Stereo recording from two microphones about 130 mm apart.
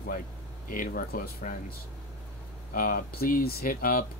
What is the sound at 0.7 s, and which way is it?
Speech, 90° left.